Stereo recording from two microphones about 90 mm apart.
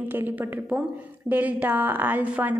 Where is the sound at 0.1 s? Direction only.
20° right (ahead or behind).